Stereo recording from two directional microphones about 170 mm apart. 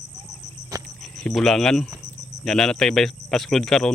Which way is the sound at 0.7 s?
20° right (ahead or behind).